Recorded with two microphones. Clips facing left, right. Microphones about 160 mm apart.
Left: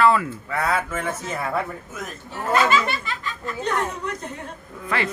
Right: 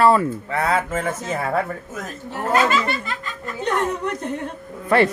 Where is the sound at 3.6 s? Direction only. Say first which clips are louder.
Right 4 dB; 60° right (ahead or behind).